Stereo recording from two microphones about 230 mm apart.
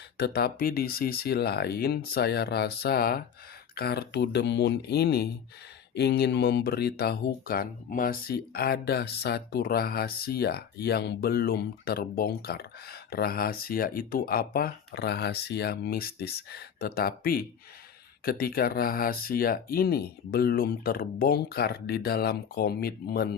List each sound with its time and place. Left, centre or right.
0.2 s speech: left